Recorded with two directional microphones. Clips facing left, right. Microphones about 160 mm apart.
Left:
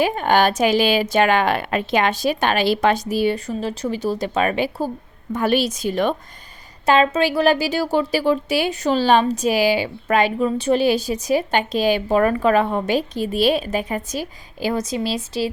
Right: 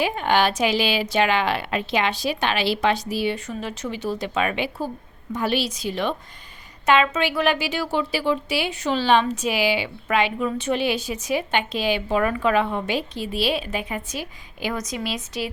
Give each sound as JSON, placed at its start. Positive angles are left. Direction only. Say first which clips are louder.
{"t": 0.0, "sound": "a woman's voice", "louder": "left 4 dB", "side_deg": 45}
{"t": 5.3, "sound": "a woman's voice", "louder": "left 5 dB", "side_deg": 50}
{"t": 6.8, "sound": "speech", "louder": "left 3 dB", "side_deg": 35}